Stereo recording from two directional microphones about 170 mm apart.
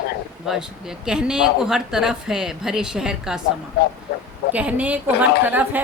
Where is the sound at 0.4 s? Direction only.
5° right (ahead or behind).